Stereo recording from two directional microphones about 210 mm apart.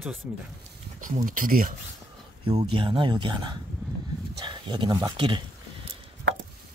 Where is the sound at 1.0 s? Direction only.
40° right (ahead or behind).